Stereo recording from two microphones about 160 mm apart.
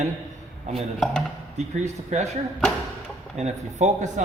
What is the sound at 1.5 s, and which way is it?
A man's voice, 45° right (ahead or behind).